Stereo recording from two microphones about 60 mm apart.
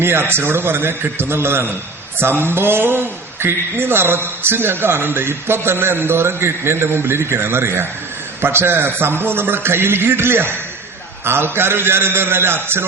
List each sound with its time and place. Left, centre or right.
0.0 s speech: right